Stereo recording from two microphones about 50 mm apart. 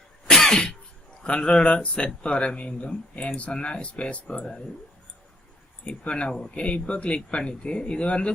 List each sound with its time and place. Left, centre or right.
0.3 s cough: centre
1.2 s speech: centre
5.8 s speech: left